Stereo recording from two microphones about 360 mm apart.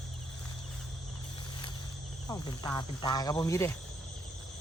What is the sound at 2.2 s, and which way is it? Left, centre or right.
Cricket, centre.